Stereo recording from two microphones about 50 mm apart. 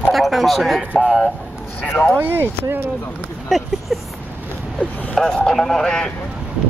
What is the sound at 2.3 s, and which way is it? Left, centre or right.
Speech, right.